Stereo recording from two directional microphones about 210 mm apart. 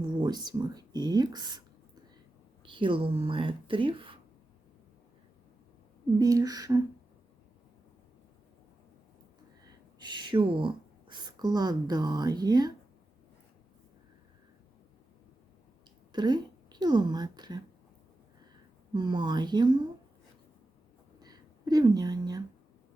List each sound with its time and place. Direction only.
0.0 s speech: 20° right (ahead or behind)
2.6 s speech: 25° right (ahead or behind)
6.1 s speech: 15° right (ahead or behind)
10.0 s speech: 20° right (ahead or behind)
16.1 s a woman's voice: 20° right (ahead or behind)
18.9 s speech: 20° right (ahead or behind)
21.2 s a sound: 20° right (ahead or behind)